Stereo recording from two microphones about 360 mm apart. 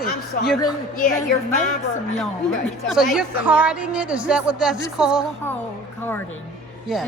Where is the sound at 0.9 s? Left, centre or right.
Left.